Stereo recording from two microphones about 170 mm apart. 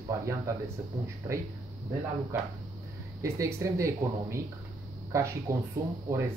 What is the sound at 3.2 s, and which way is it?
Speech, 15° right (ahead or behind).